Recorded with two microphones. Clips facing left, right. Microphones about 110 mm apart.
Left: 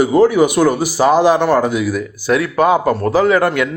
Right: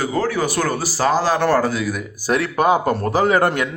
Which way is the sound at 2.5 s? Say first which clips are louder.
Left 3 dB; 30° left (ahead or behind).